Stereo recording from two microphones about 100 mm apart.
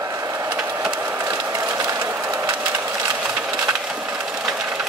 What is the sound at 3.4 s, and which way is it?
Splinter, 10° right (ahead or behind).